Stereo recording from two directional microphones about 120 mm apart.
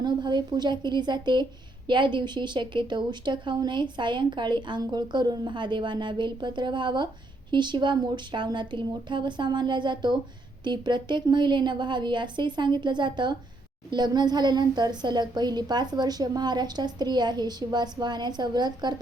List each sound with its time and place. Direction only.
0.0 s a woman's voice: 40° right (ahead or behind)